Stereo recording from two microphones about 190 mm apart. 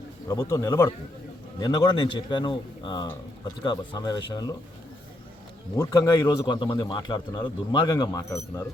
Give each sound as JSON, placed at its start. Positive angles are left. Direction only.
{"t": 0.3, "sound": "a man's voice", "side_deg": 20}
{"t": 5.7, "sound": "a man's voice", "side_deg": 15}